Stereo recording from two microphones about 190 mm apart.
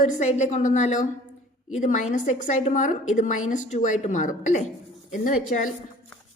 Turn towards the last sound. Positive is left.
turn(degrees=45)  # may be behind; listen again after turning